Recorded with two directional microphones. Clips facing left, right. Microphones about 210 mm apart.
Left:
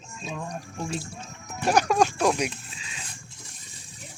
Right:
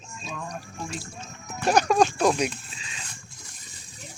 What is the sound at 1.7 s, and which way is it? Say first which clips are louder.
Speech: right 1 dB; 10° left (ahead or behind).